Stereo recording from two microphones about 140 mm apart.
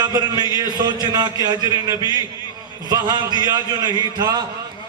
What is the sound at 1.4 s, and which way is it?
Music, 25° right (ahead or behind).